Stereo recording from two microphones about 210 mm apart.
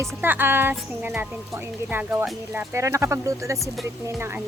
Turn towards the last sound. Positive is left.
turn(degrees=-10)  # may be behind; listen again after turning